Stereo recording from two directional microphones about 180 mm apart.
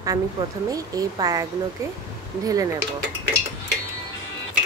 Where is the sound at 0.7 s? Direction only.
20° right (ahead or behind).